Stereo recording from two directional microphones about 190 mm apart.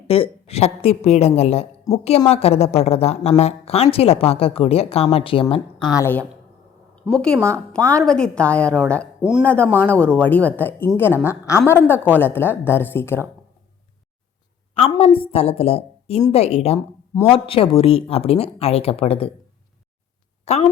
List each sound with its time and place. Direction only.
0.1 s a woman's voice: 30° left (ahead or behind); by 7.3 s 5° left (ahead or behind)
7.3 s speech: 15° right (ahead or behind)
7.7 s a woman's voice: 5° left (ahead or behind)
14.8 s a woman's voice: 35° left (ahead or behind)
20.4 s a woman's voice: 35° left (ahead or behind)